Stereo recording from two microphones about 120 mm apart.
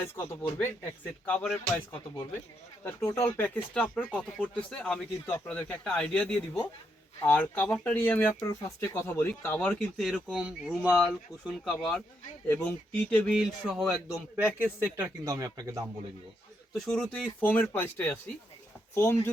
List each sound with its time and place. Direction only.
0.0 s speech: 20° left (ahead or behind)
1.2 s speech: 5° left (ahead or behind)
2.8 s speech: 25° left (ahead or behind)
8.4 s speech: 30° left (ahead or behind)
9.0 s speech: 15° left (ahead or behind)
10.0 s speech: centre (ahead or behind)
13.3 s speech: 5° right (ahead or behind)
14.3 s a man's voice: 15° right (ahead or behind)
16.7 s speech: 5° left (ahead or behind); by 19.3 s 20° left (ahead or behind)